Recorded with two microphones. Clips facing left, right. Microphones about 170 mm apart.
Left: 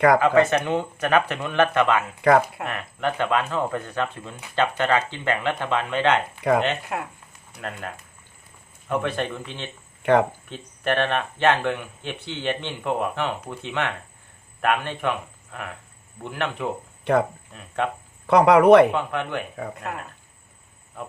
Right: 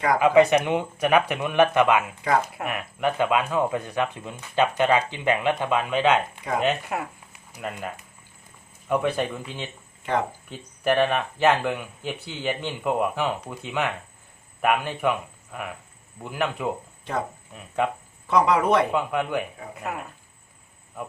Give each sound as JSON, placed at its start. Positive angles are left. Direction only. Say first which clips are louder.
{"t": 0.2, "sound": "speech", "louder": "right 1 dB", "side_deg": -10}
{"t": 10.0, "sound": "speech", "louder": "left 7 dB", "side_deg": 65}
{"t": 10.5, "sound": "speech", "louder": "right 6 dB", "side_deg": -5}
{"t": 17.0, "sound": "speech", "louder": "left 10 dB", "side_deg": 65}
{"t": 17.5, "sound": "speech", "louder": "right 4 dB", "side_deg": -10}
{"t": 18.3, "sound": "speech", "louder": "left 7 dB", "side_deg": 65}
{"t": 18.9, "sound": "speech", "louder": "right 2 dB", "side_deg": -5}